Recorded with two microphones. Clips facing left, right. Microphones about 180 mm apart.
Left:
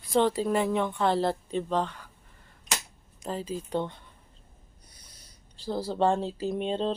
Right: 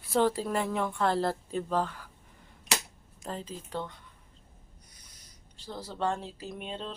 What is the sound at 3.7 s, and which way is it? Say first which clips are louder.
Speech: left 6 dB; 20° left (ahead or behind).